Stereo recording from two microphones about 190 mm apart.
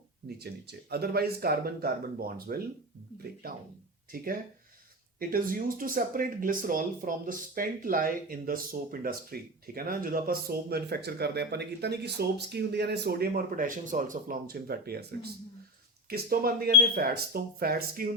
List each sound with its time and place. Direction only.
0.3 s speech: 55° right (ahead or behind)
4.1 s speech: 50° right (ahead or behind)